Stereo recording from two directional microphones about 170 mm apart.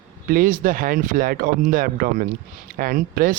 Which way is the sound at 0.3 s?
55° right (ahead or behind).